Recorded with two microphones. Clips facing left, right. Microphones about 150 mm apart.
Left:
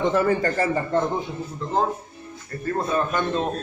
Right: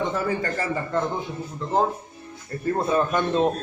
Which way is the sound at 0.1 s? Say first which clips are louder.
Left 5 dB; 60° left (ahead or behind).